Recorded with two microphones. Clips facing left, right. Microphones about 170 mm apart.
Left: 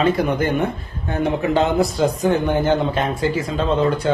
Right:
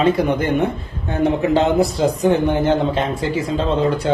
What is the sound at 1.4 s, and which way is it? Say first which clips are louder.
Speech: right 1 dB; 35° right (ahead or behind).